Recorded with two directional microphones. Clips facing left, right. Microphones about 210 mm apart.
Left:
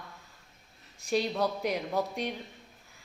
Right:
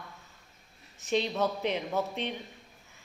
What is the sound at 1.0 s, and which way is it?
A woman's voice, 10° left (ahead or behind).